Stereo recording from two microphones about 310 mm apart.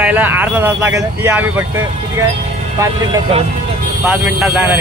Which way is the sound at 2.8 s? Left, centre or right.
Centre.